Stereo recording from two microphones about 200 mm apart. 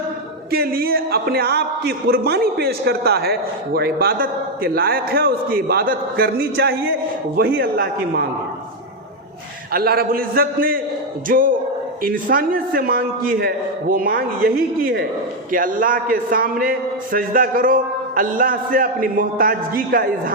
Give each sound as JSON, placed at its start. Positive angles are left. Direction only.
{"t": 0.5, "sound": "a man's voice", "side_deg": -50}
{"t": 9.7, "sound": "a man's voice", "side_deg": -50}